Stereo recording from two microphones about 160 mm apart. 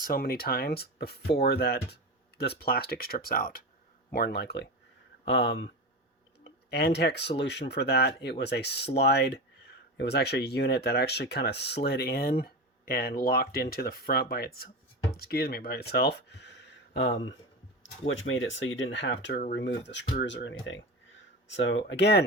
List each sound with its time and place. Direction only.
0.0 s speech: 70° left (ahead or behind)
4.1 s speech: 85° left
6.7 s speech: 90° left
18.9 s speech: 90° left
21.8 s speech: 90° left